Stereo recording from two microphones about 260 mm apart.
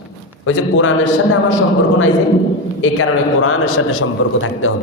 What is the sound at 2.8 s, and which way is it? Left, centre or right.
A man's voice, left.